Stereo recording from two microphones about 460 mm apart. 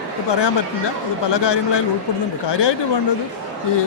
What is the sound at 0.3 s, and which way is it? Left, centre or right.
Speech, left.